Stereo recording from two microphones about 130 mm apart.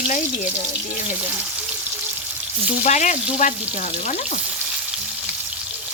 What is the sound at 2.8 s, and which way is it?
Frying, 65° left (ahead or behind).